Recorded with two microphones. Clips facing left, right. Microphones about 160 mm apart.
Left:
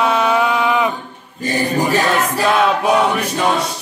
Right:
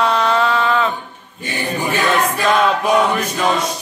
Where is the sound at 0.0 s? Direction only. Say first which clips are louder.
Left 1 dB; 5° left (ahead or behind).